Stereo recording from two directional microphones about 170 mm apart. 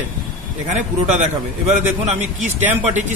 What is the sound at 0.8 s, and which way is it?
A man's voice, 45° right (ahead or behind).